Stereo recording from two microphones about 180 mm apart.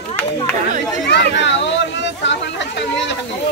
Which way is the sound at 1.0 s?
75° left (ahead or behind).